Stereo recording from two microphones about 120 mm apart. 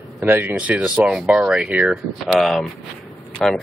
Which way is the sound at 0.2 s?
15° right (ahead or behind).